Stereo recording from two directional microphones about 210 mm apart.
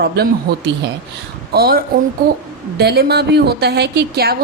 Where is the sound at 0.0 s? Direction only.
55° right (ahead or behind).